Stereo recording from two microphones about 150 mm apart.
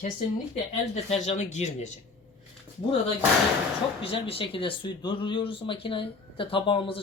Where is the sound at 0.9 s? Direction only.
45° left (ahead or behind).